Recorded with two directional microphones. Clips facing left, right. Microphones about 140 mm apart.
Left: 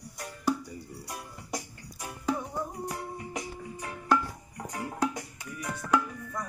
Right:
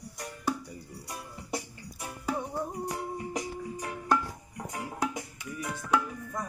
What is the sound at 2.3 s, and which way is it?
Music, 35° right (ahead or behind).